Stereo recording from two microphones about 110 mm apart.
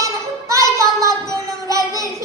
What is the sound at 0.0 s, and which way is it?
Child singing, 30° right (ahead or behind).